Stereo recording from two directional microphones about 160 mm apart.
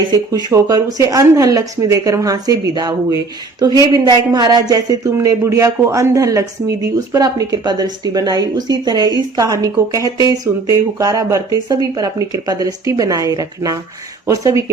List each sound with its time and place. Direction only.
0.1 s speech: 25° right (ahead or behind)